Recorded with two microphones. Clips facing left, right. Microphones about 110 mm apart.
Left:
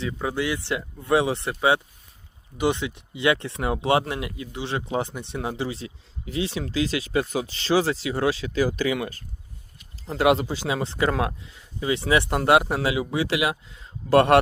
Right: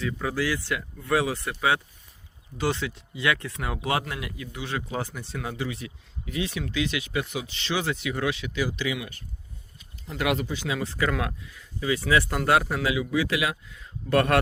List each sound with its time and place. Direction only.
0.0 s speech: 25° left (ahead or behind); by 9.2 s 45° left (ahead or behind)
10.1 s speech: 30° left (ahead or behind)